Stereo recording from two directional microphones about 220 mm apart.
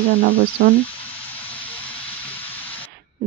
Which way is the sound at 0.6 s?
45° right (ahead or behind).